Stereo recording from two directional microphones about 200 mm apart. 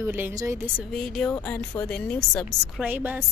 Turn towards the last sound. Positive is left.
turn(degrees=-10)  # may be behind; listen again after turning